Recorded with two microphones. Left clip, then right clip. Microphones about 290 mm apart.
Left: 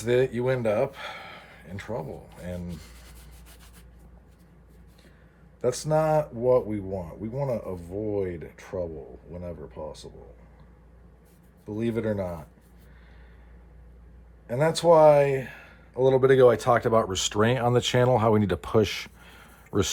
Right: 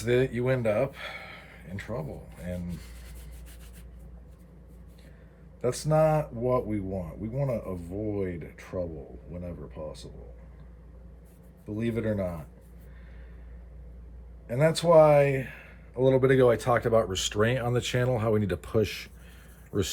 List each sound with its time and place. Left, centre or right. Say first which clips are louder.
0.0 s speech: left 2 dB; centre
5.6 s speech: left 1 dB; centre
11.6 s speech: left 2 dB; centre
14.4 s speech: left 3 dB; centre